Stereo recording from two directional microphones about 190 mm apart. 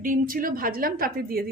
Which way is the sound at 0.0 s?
45° right (ahead or behind).